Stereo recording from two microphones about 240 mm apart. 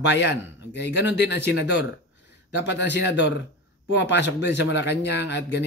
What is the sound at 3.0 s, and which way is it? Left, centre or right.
Speech, left.